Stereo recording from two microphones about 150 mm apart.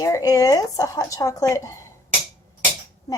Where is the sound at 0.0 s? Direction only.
20° left (ahead or behind).